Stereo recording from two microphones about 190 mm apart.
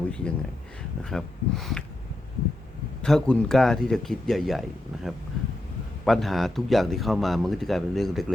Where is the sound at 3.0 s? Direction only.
5° left (ahead or behind).